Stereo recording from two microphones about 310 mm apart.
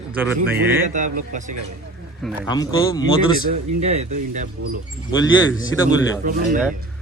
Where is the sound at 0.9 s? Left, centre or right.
Right.